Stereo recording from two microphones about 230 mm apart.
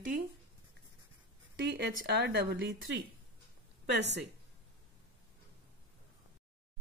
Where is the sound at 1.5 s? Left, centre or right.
Right.